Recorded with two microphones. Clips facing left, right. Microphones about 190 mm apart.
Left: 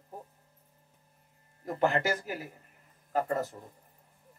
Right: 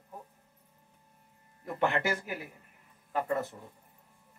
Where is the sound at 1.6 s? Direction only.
40° left (ahead or behind).